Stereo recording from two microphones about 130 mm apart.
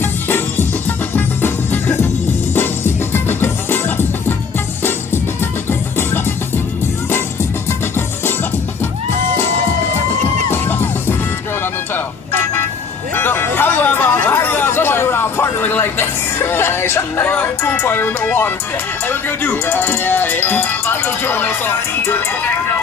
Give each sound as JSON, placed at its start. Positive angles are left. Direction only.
{"t": 0.0, "sound": "music", "side_deg": 15}
{"t": 10.5, "sound": "music", "side_deg": 15}
{"t": 13.1, "sound": "chatter", "side_deg": 15}
{"t": 19.0, "sound": "speech", "side_deg": 15}